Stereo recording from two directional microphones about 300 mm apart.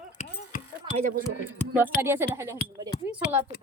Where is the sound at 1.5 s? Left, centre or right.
Centre.